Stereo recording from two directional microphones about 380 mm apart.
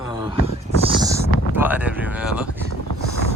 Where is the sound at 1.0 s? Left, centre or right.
Centre.